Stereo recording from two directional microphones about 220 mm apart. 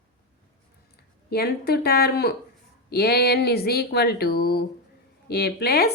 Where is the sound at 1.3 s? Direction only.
45° left (ahead or behind).